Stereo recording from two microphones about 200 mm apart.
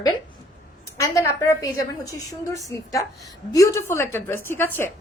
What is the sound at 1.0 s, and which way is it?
A woman's voice, 15° left (ahead or behind).